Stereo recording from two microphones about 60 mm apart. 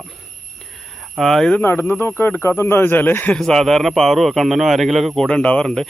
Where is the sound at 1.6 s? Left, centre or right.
Left.